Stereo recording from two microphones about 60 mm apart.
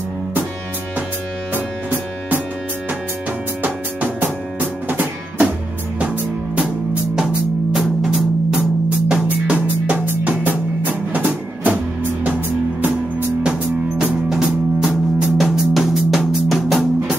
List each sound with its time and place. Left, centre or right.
4.2 s music: right
7.7 s music: centre
8.8 s music: centre
13.4 s music: centre